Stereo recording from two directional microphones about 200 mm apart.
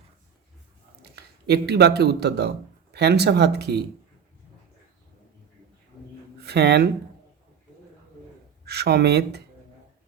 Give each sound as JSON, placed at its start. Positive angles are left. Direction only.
{"t": 1.0, "sound": "speech", "side_deg": -55}
{"t": 6.4, "sound": "speech", "side_deg": -55}
{"t": 8.6, "sound": "speech", "side_deg": -55}